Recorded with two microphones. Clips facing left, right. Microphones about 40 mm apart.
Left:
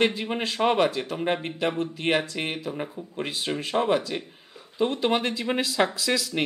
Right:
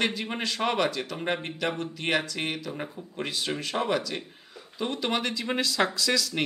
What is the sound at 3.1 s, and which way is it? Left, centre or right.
Speech, left.